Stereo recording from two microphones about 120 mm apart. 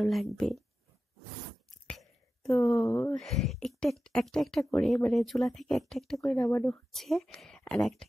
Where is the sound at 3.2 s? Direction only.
Centre (ahead or behind).